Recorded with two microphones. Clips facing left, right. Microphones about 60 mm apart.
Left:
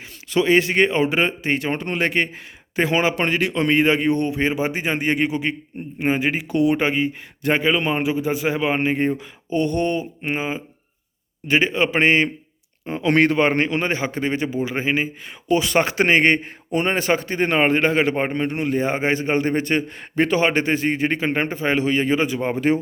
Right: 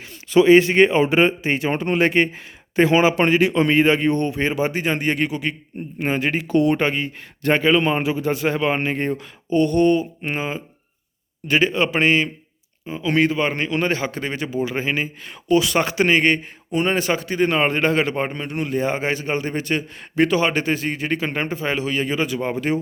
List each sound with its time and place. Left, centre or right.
0.3 s a man's voice: centre; by 5.5 s left
6.0 s speech: centre
10.2 s speech: centre
11.9 s a man's voice: left
12.8 s speech: left
13.8 s speech: left
15.6 s speech: left